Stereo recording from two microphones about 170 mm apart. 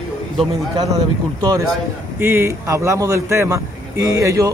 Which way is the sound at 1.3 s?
20° right (ahead or behind).